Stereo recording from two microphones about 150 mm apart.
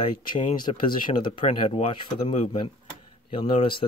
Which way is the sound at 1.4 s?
40° left (ahead or behind).